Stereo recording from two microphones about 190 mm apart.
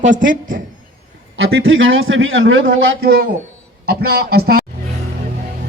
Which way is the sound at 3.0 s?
50° right (ahead or behind).